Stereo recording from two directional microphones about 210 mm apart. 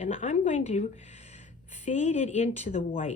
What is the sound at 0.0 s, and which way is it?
Speech, 35° left (ahead or behind).